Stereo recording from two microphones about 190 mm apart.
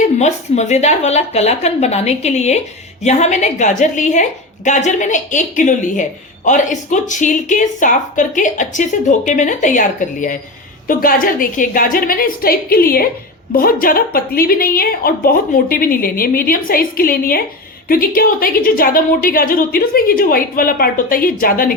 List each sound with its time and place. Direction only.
0.2 s a woman's voice: 35° left (ahead or behind)